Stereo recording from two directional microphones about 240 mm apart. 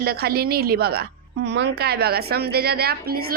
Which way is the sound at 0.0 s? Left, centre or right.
Right.